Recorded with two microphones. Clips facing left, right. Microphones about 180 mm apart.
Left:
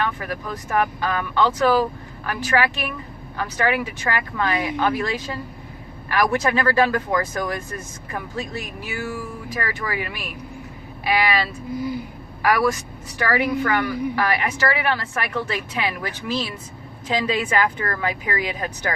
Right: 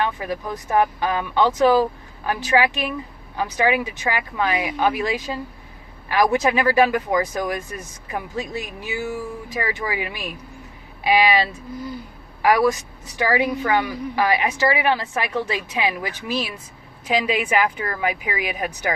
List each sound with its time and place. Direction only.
0.0 s speech: 20° right (ahead or behind)